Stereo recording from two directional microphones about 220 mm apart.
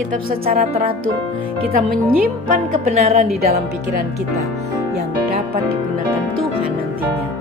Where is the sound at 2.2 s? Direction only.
40° right (ahead or behind).